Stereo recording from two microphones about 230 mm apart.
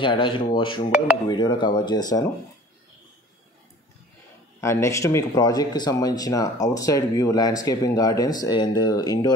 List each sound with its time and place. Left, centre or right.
0.0 s speech: left
4.6 s speech: centre